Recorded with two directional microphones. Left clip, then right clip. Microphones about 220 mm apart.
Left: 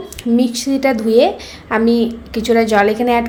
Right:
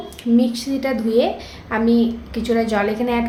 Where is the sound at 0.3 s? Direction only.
35° left (ahead or behind).